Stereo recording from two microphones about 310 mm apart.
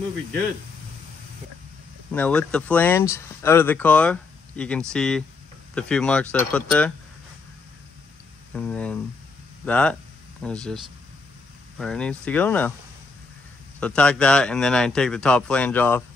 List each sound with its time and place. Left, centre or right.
2.1 s speech: centre
8.5 s speech: centre
11.8 s speech: centre
13.7 s speech: centre